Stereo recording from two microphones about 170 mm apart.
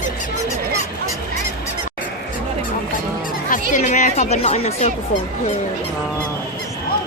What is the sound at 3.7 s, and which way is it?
A woman's voice, 45° left (ahead or behind).